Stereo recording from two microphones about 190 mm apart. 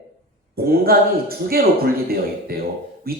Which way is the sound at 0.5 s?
55° right (ahead or behind).